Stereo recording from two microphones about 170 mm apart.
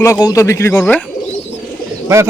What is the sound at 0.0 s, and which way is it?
Speech, 20° left (ahead or behind).